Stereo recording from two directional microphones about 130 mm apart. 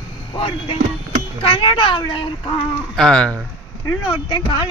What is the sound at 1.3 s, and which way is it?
A child's voice, 45° left (ahead or behind).